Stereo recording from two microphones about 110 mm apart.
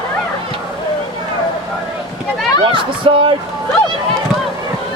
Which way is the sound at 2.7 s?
50° right (ahead or behind).